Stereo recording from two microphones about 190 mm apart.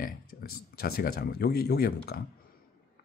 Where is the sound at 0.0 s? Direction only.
50° left (ahead or behind).